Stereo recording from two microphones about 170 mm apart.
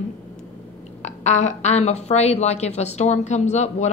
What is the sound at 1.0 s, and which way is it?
A woman's voice, 45° left (ahead or behind).